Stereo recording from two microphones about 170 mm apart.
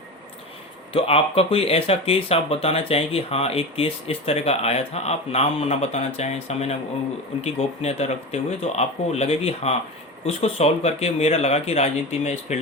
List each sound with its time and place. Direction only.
0.9 s speech: 35° left (ahead or behind)